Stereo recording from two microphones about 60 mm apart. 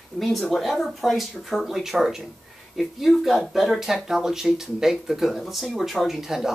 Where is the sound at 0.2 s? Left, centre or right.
Centre.